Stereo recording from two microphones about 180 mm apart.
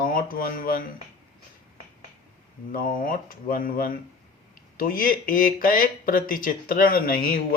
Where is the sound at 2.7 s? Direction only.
50° left (ahead or behind).